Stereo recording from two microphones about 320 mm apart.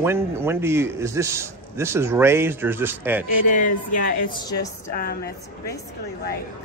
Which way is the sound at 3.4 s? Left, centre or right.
Left.